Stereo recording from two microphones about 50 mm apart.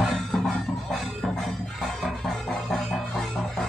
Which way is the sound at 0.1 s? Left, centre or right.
Centre.